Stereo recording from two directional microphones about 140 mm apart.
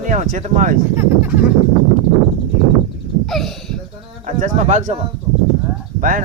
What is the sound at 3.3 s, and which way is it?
Speech, centre (ahead or behind).